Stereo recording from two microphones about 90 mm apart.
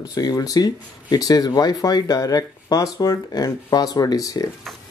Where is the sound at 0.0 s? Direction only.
45° left (ahead or behind).